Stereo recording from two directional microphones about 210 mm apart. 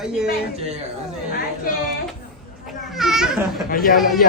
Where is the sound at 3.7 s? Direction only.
45° left (ahead or behind).